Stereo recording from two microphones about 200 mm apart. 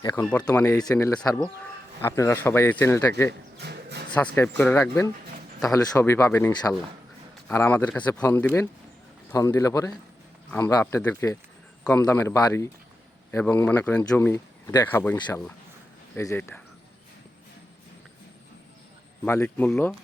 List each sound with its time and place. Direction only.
0.2 s speech: 5° left (ahead or behind)
3.6 s a sound: 55° right (ahead or behind)
4.4 s speech: 10° left (ahead or behind)
19.2 s speech: 10° left (ahead or behind)